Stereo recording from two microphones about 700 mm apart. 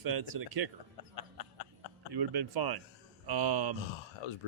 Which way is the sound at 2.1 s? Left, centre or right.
Right.